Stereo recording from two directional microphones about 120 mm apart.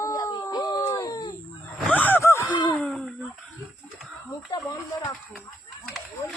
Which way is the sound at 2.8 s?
5° left (ahead or behind).